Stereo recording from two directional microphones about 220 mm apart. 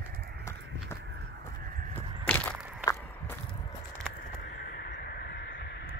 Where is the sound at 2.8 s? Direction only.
15° left (ahead or behind).